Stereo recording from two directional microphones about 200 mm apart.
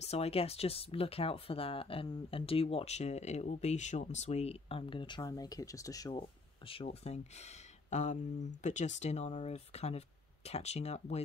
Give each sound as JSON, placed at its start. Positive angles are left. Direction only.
{"t": 0.0, "sound": "speech", "side_deg": 30}
{"t": 6.7, "sound": "speech", "side_deg": 30}